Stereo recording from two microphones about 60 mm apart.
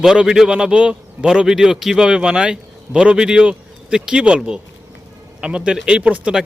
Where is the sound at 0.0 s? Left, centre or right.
Centre.